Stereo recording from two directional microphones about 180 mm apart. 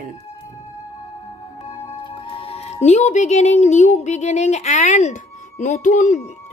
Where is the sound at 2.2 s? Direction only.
30° left (ahead or behind).